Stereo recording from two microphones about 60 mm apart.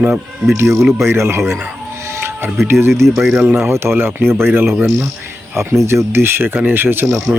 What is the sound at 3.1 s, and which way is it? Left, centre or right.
Speech, centre.